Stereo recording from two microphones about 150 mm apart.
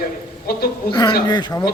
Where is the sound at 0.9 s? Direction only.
30° left (ahead or behind).